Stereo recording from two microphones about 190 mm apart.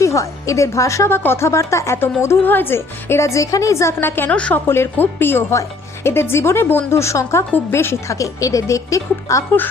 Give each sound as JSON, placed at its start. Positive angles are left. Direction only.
{"t": 0.0, "sound": "a woman's voice", "side_deg": 15}